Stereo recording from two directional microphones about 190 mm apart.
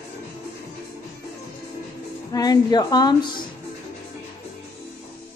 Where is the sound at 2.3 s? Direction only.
20° left (ahead or behind).